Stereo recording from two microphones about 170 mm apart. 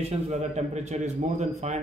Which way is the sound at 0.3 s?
40° right (ahead or behind).